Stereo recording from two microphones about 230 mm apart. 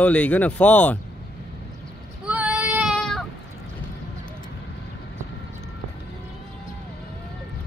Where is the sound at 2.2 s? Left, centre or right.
Centre.